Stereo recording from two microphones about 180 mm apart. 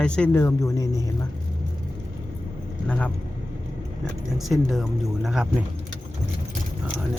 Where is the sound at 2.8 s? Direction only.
5° left (ahead or behind).